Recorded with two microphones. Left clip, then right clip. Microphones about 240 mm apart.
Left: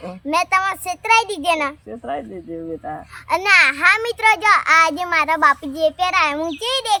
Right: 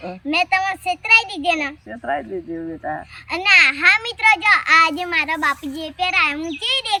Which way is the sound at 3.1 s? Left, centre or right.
Centre.